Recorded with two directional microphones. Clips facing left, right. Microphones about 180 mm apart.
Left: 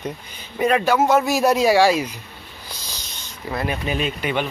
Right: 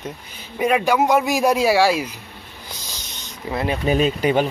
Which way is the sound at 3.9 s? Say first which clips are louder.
Right 10 dB; 35° right (ahead or behind).